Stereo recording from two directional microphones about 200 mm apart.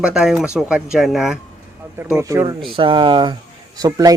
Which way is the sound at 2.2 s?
15° right (ahead or behind).